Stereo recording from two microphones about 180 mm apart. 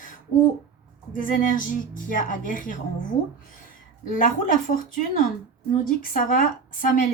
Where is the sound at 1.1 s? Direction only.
50° left (ahead or behind).